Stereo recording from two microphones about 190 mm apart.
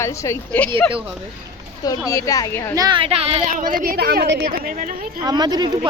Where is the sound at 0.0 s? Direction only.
15° left (ahead or behind).